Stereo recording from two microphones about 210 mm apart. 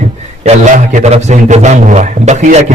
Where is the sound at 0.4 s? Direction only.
35° right (ahead or behind).